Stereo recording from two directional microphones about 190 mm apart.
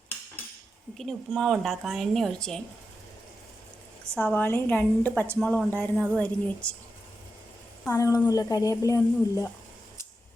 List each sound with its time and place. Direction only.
0.9 s a woman's voice: centre (ahead or behind)
4.1 s a woman's voice: 5° left (ahead or behind)
7.9 s speech: 15° left (ahead or behind)